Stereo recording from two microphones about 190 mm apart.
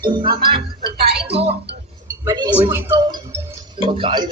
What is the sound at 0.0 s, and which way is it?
A woman's voice, 25° right (ahead or behind).